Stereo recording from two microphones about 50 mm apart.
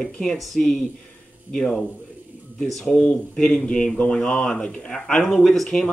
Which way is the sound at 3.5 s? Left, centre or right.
Left.